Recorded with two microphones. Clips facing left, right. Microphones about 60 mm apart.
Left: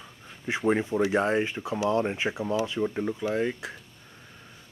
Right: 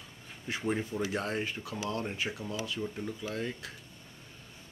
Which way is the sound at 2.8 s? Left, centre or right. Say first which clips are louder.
Left 9 dB; left.